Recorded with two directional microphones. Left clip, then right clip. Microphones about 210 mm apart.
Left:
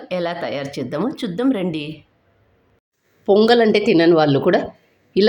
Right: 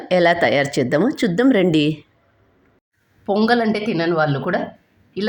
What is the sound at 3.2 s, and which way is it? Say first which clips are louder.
Speech: left 4 dB; 10° left (ahead or behind).